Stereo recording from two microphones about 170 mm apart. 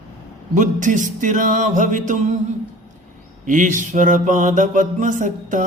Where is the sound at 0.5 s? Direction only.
45° right (ahead or behind).